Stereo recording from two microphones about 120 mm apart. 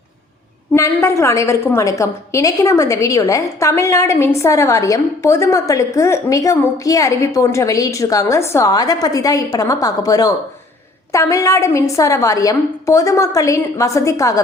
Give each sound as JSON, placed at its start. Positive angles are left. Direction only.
{"t": 1.0, "sound": "a woman's voice", "side_deg": 25}